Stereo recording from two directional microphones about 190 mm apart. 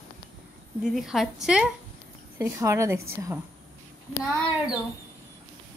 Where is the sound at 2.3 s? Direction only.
15° right (ahead or behind).